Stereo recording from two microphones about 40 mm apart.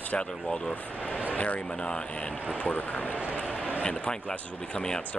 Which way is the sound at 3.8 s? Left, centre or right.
Left.